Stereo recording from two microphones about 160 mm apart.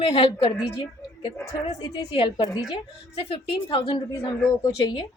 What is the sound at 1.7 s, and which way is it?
A woman's voice, 35° left (ahead or behind).